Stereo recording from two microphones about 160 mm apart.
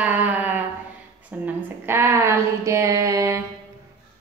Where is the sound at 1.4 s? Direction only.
15° right (ahead or behind).